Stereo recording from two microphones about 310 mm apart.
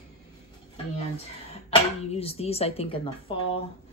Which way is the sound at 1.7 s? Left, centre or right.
Centre.